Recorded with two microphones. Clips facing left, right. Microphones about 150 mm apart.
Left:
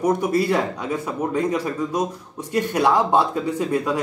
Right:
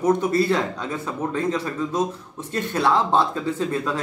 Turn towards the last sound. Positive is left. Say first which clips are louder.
# left 2 dB
turn(degrees=15)  # may be behind; listen again after turning